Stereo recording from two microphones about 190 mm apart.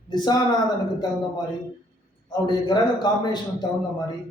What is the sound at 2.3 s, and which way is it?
Speech, 25° left (ahead or behind).